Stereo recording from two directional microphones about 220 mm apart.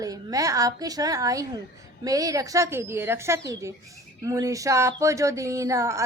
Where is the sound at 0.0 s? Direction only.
15° right (ahead or behind).